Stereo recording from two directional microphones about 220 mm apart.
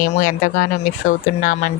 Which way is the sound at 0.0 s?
40° left (ahead or behind).